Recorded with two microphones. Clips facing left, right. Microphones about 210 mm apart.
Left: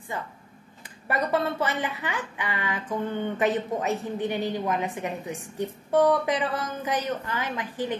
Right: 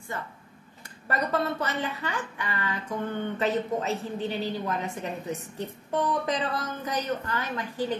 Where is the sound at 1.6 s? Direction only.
15° left (ahead or behind).